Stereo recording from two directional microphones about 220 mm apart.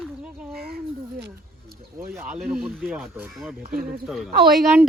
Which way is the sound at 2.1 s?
5° right (ahead or behind).